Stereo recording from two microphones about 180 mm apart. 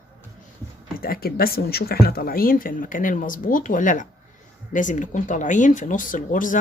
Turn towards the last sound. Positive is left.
turn(degrees=45)  # may be behind; listen again after turning